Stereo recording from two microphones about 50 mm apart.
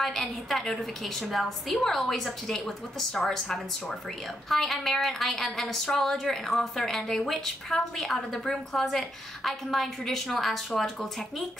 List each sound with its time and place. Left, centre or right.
0.0 s a woman's voice: centre